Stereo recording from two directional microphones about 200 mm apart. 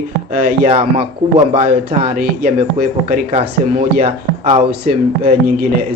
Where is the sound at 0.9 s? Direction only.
30° right (ahead or behind).